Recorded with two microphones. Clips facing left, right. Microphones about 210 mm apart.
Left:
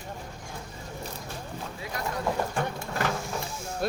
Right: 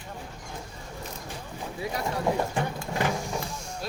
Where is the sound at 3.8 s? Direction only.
55° left (ahead or behind).